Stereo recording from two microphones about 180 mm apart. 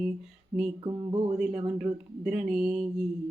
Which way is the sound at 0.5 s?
10° right (ahead or behind).